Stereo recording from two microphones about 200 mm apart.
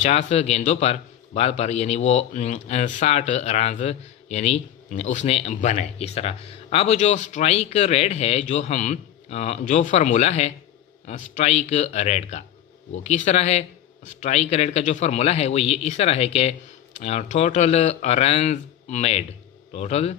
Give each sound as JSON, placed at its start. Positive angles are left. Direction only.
{"t": 0.0, "sound": "speech", "side_deg": 35}